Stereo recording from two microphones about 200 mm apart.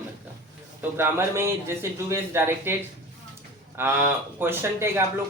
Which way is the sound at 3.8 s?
10° right (ahead or behind).